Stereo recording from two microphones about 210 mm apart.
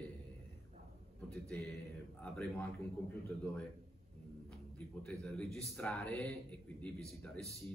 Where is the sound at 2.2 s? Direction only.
5° left (ahead or behind).